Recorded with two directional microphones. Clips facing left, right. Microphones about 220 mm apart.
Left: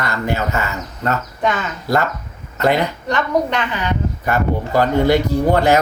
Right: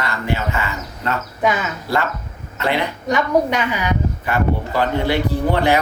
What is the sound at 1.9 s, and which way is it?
Speech, 45° left (ahead or behind).